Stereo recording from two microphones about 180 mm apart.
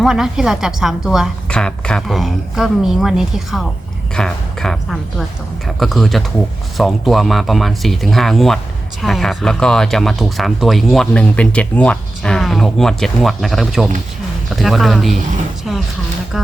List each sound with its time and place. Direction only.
0.0 s speech: centre (ahead or behind)